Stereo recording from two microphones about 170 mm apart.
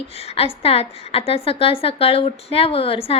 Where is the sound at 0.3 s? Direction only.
35° left (ahead or behind).